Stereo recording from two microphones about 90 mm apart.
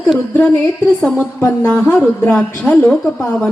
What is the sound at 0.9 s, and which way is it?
A woman's voice, 15° left (ahead or behind).